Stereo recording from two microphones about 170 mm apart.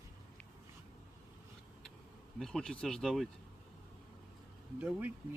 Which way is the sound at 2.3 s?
Centre (ahead or behind).